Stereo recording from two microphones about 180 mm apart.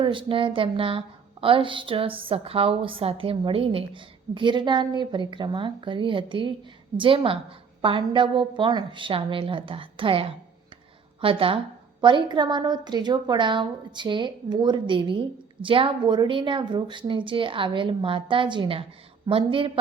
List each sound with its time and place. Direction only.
0.0 s a woman's voice: 30° right (ahead or behind)